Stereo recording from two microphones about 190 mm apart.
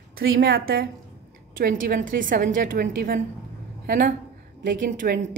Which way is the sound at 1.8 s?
45° right (ahead or behind).